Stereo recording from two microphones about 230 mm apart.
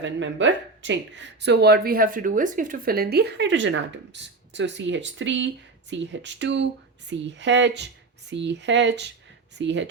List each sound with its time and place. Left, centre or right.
0.0 s speech: right